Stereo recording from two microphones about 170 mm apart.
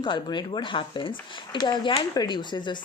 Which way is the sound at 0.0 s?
25° left (ahead or behind).